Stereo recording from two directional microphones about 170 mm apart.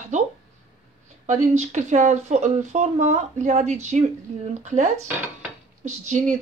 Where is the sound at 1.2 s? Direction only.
45° right (ahead or behind).